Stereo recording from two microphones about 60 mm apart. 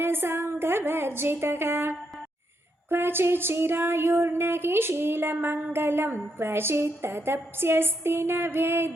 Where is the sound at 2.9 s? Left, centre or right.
Right.